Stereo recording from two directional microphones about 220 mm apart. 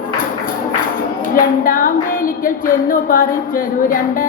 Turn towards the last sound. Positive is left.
turn(degrees=40)  # may be behind; listen again after turning